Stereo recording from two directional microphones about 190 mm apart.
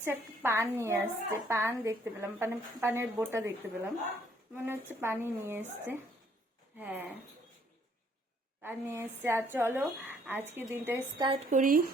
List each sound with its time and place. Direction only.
0.0 s a woman's voice: 10° right (ahead or behind)
4.5 s a woman's voice: 10° right (ahead or behind)
8.6 s a woman's voice: 10° right (ahead or behind)
11.3 s speech: 45° right (ahead or behind)